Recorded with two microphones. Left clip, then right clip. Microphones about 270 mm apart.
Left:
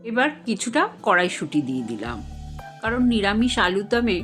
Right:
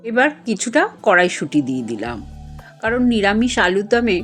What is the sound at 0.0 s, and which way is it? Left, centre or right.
Speech, centre.